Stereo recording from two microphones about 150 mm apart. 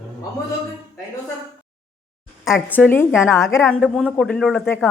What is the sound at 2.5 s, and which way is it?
A woman's voice, 10° left (ahead or behind).